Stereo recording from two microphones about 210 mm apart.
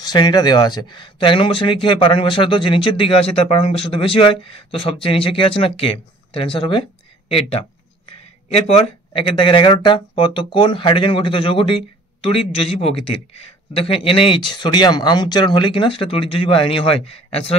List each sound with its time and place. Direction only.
0.0 s speech: 20° left (ahead or behind)